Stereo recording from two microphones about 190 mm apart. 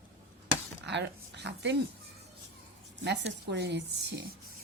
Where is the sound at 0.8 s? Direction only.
65° right (ahead or behind).